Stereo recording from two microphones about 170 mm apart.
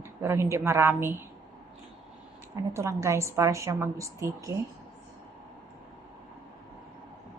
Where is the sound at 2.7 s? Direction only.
15° right (ahead or behind).